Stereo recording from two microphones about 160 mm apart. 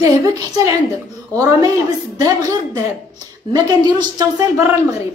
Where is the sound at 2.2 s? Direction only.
25° right (ahead or behind).